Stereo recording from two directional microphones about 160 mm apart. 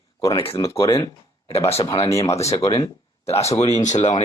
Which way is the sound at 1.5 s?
40° left (ahead or behind).